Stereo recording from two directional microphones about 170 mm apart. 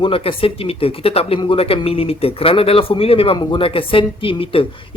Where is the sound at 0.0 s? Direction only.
35° left (ahead or behind).